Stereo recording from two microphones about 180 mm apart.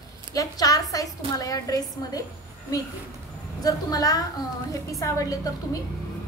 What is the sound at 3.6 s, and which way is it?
A woman's voice, 20° left (ahead or behind).